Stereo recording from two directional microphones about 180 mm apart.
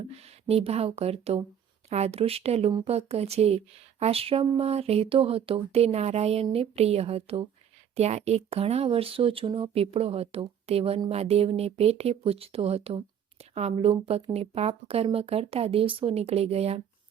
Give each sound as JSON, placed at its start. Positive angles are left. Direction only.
{"t": 0.1, "sound": "speech", "side_deg": -35}